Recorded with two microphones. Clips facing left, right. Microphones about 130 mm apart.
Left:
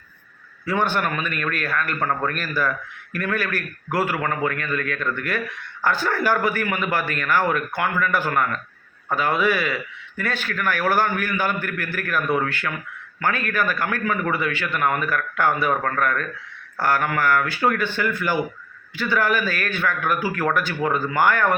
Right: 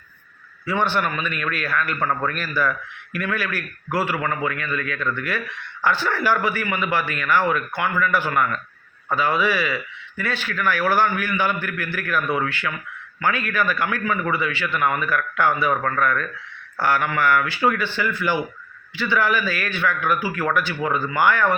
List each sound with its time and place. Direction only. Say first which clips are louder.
0.6 s a man's voice: even; 45° left (ahead or behind)